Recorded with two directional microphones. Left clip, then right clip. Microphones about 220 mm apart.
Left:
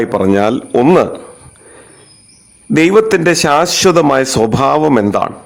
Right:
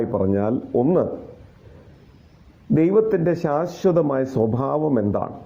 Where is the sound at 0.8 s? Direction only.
55° left (ahead or behind).